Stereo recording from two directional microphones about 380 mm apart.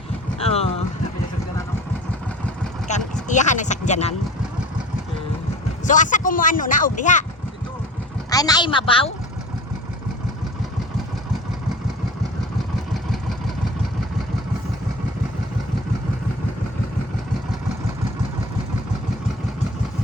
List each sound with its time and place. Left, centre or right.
0.4 s boat: centre
2.8 s speech: centre
5.8 s speech: centre
8.3 s speech: centre